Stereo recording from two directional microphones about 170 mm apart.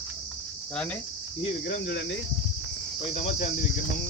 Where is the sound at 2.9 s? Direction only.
40° left (ahead or behind).